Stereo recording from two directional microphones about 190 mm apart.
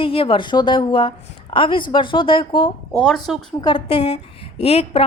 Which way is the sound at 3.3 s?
5° right (ahead or behind).